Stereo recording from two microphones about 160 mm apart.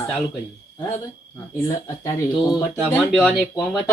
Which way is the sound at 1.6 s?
20° left (ahead or behind).